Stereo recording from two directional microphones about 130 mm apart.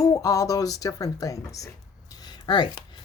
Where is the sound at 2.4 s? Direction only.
35° left (ahead or behind).